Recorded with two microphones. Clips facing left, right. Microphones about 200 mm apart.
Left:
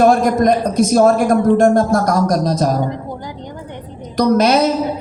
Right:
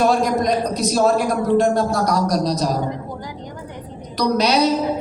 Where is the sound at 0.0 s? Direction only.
50° left (ahead or behind).